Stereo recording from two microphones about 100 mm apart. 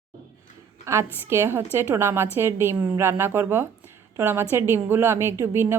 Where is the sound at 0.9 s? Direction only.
25° right (ahead or behind).